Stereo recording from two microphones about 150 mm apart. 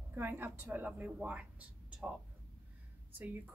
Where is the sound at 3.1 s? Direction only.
10° right (ahead or behind).